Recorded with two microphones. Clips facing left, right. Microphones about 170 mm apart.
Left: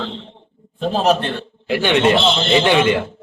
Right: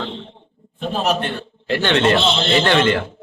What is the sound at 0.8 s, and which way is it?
Speech, 35° left (ahead or behind).